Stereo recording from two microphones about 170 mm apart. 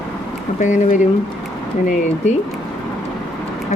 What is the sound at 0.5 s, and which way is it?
Speech, 45° left (ahead or behind).